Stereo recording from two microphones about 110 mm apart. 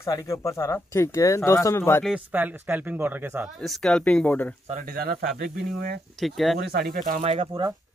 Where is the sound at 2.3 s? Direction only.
15° right (ahead or behind).